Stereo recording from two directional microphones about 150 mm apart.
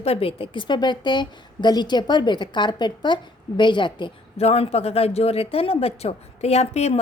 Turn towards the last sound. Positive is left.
turn(degrees=45)  # may be behind; listen again after turning